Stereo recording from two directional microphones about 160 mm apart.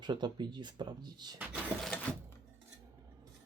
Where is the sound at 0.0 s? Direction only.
30° right (ahead or behind).